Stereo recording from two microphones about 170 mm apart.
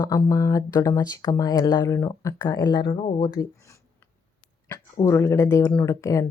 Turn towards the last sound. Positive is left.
turn(degrees=20)  # may be behind; listen again after turning